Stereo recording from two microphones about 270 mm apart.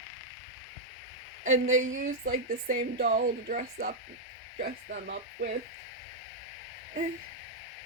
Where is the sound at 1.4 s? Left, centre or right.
Right.